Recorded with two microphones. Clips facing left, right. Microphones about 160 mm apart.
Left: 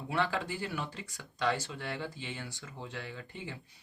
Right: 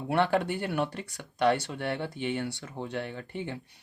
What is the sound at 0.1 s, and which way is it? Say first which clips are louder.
Speech: right 7 dB; 65° right (ahead or behind).